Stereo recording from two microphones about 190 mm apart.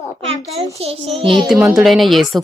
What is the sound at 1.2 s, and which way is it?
Speech, 25° right (ahead or behind).